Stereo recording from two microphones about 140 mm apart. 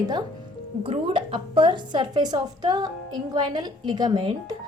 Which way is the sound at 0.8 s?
40° right (ahead or behind).